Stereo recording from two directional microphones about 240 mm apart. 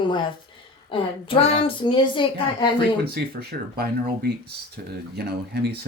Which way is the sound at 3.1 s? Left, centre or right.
Right.